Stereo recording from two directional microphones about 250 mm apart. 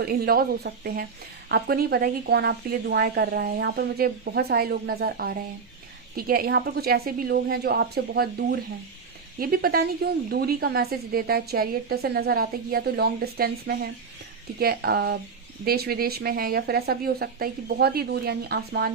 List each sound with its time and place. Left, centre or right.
0.0 s a woman's voice: right